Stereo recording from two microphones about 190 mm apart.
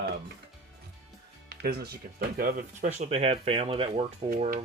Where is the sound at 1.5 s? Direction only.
60° right (ahead or behind).